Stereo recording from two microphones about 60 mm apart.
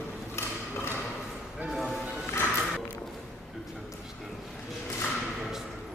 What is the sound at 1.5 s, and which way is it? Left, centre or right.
Music, centre.